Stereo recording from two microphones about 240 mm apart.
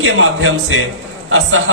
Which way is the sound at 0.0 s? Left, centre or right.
Right.